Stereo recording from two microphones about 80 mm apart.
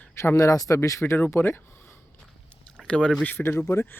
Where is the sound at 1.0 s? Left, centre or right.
Left.